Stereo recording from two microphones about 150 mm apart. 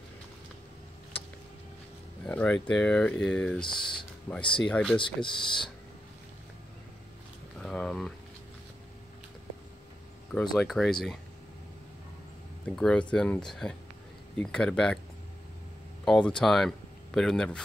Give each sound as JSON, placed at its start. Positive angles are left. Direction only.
{"t": 2.2, "sound": "speech", "side_deg": 10}
{"t": 3.6, "sound": "speech", "side_deg": 30}
{"t": 4.6, "sound": "speech", "side_deg": 5}
{"t": 4.9, "sound": "speech", "side_deg": 35}
{"t": 7.5, "sound": "speech", "side_deg": 5}
{"t": 10.5, "sound": "speech", "side_deg": 0}
{"t": 12.6, "sound": "speech", "side_deg": 5}
{"t": 16.1, "sound": "speech", "side_deg": 5}